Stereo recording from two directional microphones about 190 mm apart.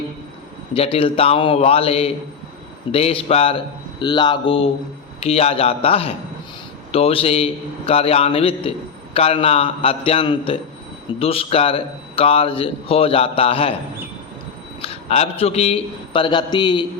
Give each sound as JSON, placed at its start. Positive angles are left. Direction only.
{"t": 0.7, "sound": "a man's voice", "side_deg": 30}
{"t": 14.8, "sound": "a man's voice", "side_deg": 30}